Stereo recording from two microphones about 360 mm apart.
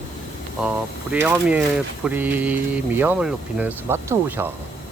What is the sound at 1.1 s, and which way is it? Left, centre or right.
Speech, centre.